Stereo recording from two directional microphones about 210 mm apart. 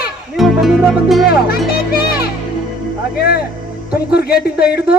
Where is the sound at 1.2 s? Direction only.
45° left (ahead or behind).